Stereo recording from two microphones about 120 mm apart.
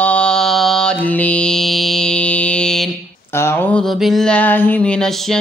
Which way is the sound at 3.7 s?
Centre (ahead or behind).